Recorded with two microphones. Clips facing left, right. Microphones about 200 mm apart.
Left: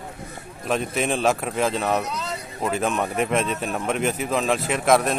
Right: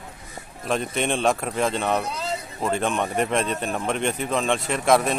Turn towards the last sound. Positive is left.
turn(degrees=0)  # may be behind; listen again after turning